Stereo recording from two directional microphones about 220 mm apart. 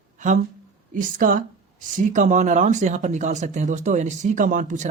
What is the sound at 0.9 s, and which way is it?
Speech, 40° right (ahead or behind).